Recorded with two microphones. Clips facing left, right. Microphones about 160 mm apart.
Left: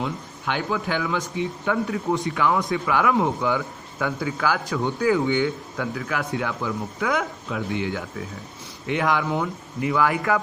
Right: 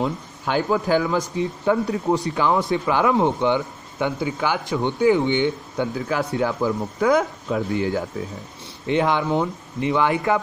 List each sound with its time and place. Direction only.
0.0 s speech: 35° right (ahead or behind)